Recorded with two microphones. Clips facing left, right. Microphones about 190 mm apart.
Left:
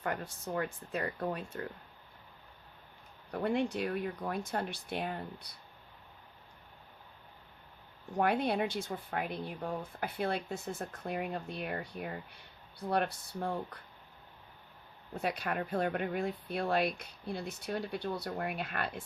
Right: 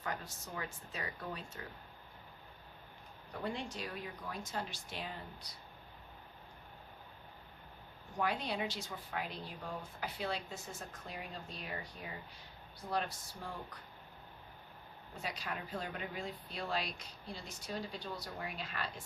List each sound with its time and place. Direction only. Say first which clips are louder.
0.0 s speech: left 6 dB; 55° left (ahead or behind)
3.3 s speech: left 9 dB; 60° left (ahead or behind)
8.2 s speech: left 7 dB; 55° left (ahead or behind)
15.1 s speech: left 8 dB; 60° left (ahead or behind)